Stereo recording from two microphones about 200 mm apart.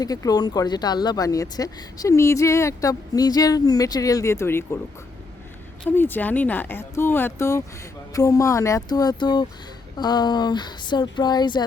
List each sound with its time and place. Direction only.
0.0 s speech: 20° left (ahead or behind)
6.0 s speech: 10° left (ahead or behind)